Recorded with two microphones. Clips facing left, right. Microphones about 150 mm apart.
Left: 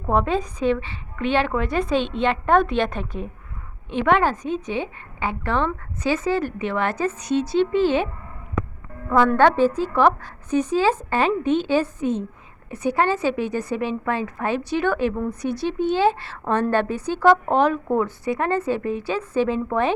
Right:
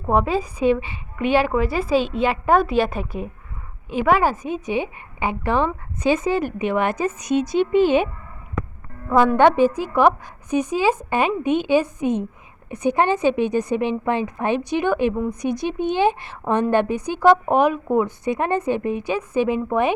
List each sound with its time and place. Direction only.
0.1 s a woman's voice: 5° right (ahead or behind)